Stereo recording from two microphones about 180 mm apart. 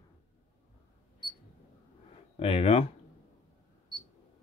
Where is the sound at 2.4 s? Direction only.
30° left (ahead or behind).